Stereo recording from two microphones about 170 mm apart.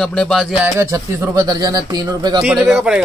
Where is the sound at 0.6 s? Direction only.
15° right (ahead or behind).